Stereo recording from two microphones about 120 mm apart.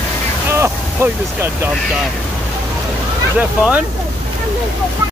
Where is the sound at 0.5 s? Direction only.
20° right (ahead or behind).